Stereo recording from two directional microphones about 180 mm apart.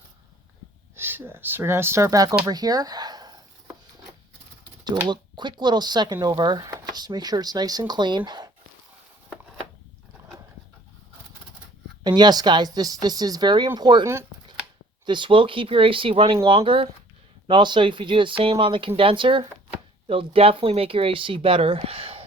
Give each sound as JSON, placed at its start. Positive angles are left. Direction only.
{"t": 0.9, "sound": "speech", "side_deg": -10}
{"t": 5.0, "sound": "speech", "side_deg": -25}
{"t": 12.0, "sound": "speech", "side_deg": -25}
{"t": 15.0, "sound": "speech", "side_deg": -25}